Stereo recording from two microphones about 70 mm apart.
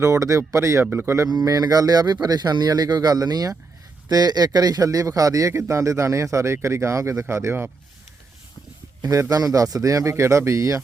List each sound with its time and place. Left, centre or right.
0.0 s a man's voice: right
0.9 s speech: right
1.3 s a man's voice: right
9.0 s a man's voice: right